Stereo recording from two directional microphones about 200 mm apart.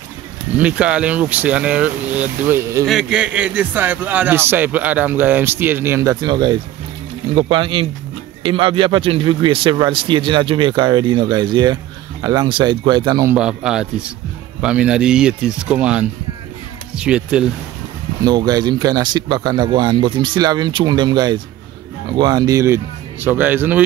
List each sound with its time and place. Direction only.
0.6 s a man's voice: 5° right (ahead or behind)
2.8 s a man's voice: centre (ahead or behind); by 13.4 s 20° right (ahead or behind)
13.4 s speech: 5° right (ahead or behind)
18.2 s a man's voice: 20° right (ahead or behind)